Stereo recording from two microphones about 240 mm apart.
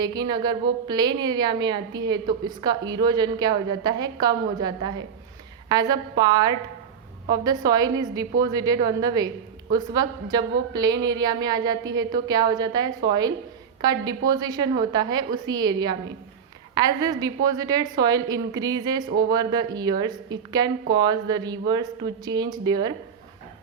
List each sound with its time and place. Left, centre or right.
0.0 s a woman's voice: centre